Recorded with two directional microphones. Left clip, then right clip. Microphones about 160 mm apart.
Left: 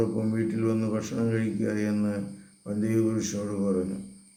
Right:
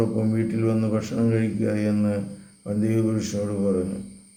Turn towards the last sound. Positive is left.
turn(degrees=-10)  # may be behind; listen again after turning